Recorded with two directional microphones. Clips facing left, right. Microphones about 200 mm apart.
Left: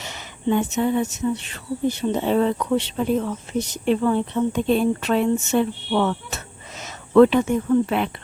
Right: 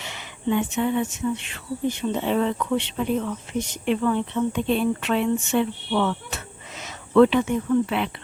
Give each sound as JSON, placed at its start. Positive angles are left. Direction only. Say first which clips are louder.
{"t": 0.0, "sound": "speech", "louder": "left 2 dB", "side_deg": 40}